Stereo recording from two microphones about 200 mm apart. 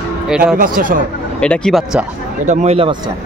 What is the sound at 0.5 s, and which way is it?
Speech, 45° right (ahead or behind).